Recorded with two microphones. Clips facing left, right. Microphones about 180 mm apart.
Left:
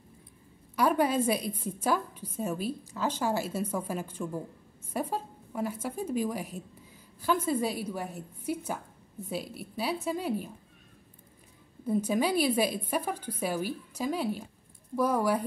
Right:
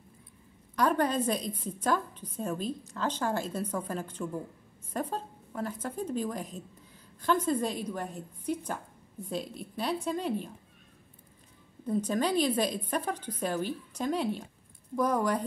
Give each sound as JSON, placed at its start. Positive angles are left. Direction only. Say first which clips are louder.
{"t": 0.7, "sound": "a woman's voice", "louder": "left 1 dB", "side_deg": 10}
{"t": 11.8, "sound": "a woman's voice", "louder": "left 1 dB", "side_deg": 10}